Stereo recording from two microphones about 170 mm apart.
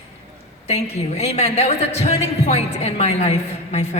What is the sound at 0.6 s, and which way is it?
A woman's voice, 40° left (ahead or behind).